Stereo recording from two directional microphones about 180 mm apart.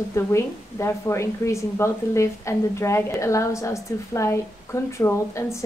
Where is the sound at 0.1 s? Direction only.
15° left (ahead or behind).